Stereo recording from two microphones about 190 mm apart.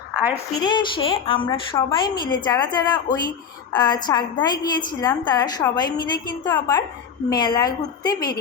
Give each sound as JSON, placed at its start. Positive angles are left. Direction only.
{"t": 0.5, "sound": "a woman's voice", "side_deg": 25}